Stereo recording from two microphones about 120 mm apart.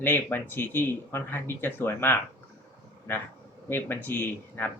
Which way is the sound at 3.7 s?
15° left (ahead or behind).